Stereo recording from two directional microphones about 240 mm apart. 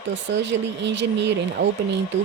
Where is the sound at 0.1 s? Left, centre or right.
Right.